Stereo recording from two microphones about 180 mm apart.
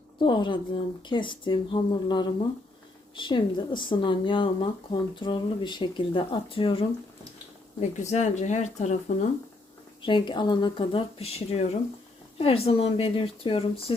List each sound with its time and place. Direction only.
0.2 s speech: 25° left (ahead or behind)
7.8 s speech: 40° left (ahead or behind)
10.1 s speech: 25° left (ahead or behind)